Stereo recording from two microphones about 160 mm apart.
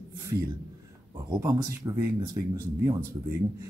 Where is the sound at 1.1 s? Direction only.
20° right (ahead or behind).